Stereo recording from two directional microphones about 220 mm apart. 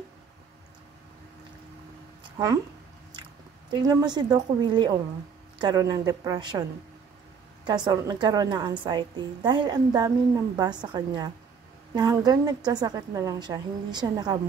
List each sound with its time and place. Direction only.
2.2 s speech: 20° right (ahead or behind)
3.8 s a woman's voice: 15° right (ahead or behind)
7.6 s a woman's voice: 20° right (ahead or behind)